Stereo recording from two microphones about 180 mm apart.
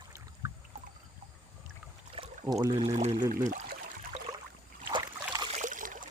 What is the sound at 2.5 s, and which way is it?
Speech, 20° right (ahead or behind).